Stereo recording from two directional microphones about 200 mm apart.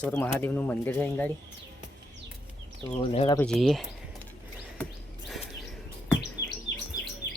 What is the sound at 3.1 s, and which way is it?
Speech, 25° left (ahead or behind).